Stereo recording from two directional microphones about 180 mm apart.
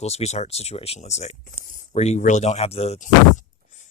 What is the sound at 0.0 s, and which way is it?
Speech, 35° left (ahead or behind).